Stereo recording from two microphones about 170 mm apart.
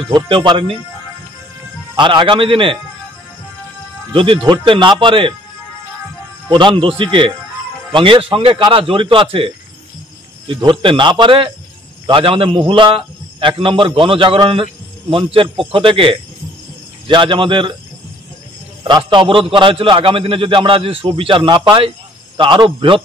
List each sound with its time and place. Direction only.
0.1 s speech: 30° right (ahead or behind)
2.0 s speech: 30° right (ahead or behind)
4.1 s speech: 30° right (ahead or behind)
6.5 s a man's voice: 30° right (ahead or behind)
10.5 s a man's voice: 30° right (ahead or behind)
18.9 s a man's voice: 25° right (ahead or behind)